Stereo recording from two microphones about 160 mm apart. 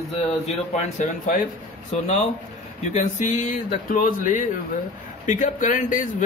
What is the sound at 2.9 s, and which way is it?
A man's voice, 50° left (ahead or behind).